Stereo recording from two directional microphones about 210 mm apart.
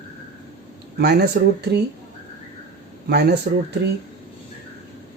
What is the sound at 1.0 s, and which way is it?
Speech, 50° right (ahead or behind).